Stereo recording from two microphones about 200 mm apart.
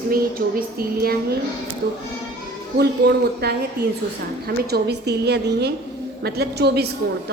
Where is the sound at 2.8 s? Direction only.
55° right (ahead or behind).